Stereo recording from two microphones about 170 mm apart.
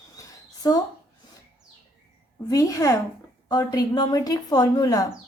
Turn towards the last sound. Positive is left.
turn(degrees=20)  # may be behind; listen again after turning